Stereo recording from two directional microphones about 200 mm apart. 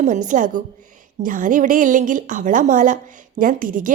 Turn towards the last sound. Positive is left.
turn(degrees=-40)  # may be behind; listen again after turning